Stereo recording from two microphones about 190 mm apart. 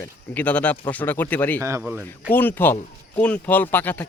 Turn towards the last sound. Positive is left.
turn(degrees=10)  # may be behind; listen again after turning